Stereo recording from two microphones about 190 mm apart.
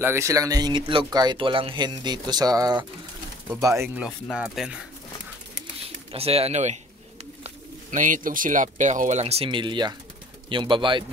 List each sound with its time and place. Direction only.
0.0 s speech: 15° right (ahead or behind)
6.1 s speech: 30° right (ahead or behind)